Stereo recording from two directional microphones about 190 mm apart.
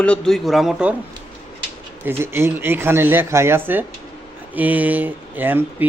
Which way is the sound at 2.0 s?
15° right (ahead or behind).